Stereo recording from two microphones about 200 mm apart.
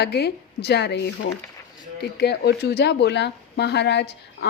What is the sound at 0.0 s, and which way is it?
Speech, 55° left (ahead or behind).